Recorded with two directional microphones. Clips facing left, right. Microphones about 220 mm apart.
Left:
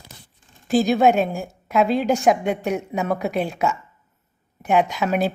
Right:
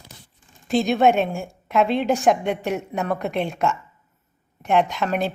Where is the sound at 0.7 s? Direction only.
Centre (ahead or behind).